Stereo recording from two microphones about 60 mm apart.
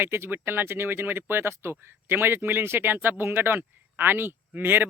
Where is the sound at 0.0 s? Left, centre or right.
Right.